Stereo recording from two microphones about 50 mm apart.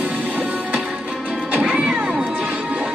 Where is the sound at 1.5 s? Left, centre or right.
Right.